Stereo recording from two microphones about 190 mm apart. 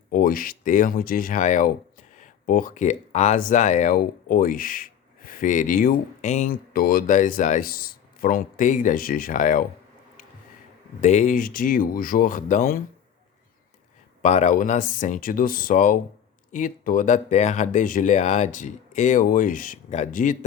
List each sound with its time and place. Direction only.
0.1 s speech: 50° left (ahead or behind)
11.0 s speech: 40° left (ahead or behind)
14.2 s speech: 40° left (ahead or behind)